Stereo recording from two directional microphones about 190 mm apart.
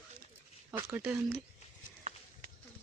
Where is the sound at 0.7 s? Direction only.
15° right (ahead or behind).